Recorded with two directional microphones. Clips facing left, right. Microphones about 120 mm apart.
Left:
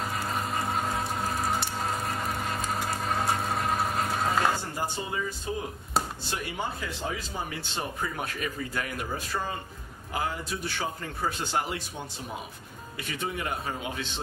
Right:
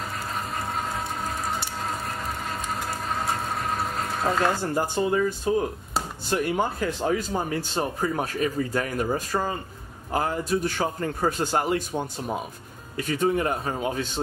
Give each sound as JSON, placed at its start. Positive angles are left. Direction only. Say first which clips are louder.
{"t": 0.2, "sound": "water", "louder": "left 1 dB", "side_deg": 0}
{"t": 2.7, "sound": "a sound", "louder": "right 1 dB", "side_deg": 0}
{"t": 4.7, "sound": "a man's voice", "louder": "right 9 dB", "side_deg": -50}